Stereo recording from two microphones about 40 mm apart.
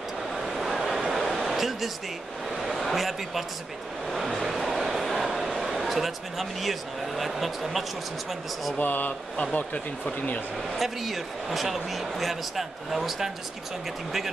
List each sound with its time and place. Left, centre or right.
0.3 s vehicle: centre
1.1 s a sound: centre
2.6 s a man's voice: centre
4.5 s a sound: centre
8.7 s speech: left
9.4 s speech: left
10.8 s speech: centre